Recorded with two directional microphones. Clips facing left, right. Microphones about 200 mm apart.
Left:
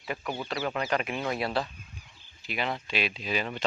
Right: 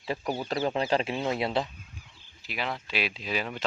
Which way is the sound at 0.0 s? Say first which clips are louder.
Right 3 dB; 30° right (ahead or behind).